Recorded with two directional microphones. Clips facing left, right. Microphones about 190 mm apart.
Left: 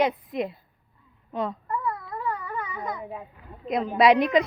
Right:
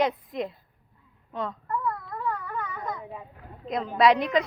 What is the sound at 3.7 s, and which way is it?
Speech, 10° left (ahead or behind).